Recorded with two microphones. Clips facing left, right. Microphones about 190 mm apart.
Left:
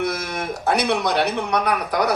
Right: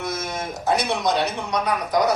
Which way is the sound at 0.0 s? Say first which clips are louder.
Left 4 dB; 65° left (ahead or behind).